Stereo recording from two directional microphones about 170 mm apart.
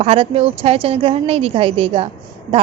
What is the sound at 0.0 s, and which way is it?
A woman's voice, 35° right (ahead or behind).